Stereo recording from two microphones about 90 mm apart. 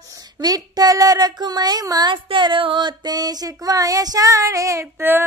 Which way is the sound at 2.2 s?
65° right (ahead or behind).